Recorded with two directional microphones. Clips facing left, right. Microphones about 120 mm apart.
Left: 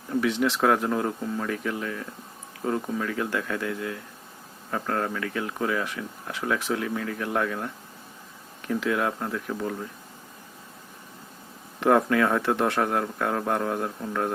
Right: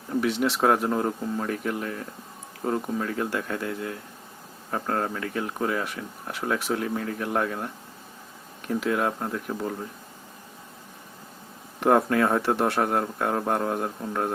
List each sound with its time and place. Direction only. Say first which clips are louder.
0.2 s speech: even; 35° right (ahead or behind)
2.6 s speech: even; 10° right (ahead or behind)
3.0 s speech: even; 30° right (ahead or behind)
11.9 s speech: even; 35° right (ahead or behind)